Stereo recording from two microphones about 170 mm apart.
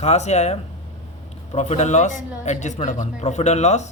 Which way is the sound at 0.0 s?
40° left (ahead or behind).